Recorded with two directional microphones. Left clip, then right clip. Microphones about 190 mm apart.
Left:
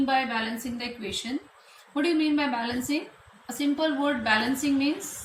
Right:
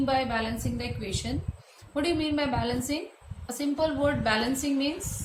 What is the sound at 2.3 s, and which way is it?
A woman's voice, 20° right (ahead or behind).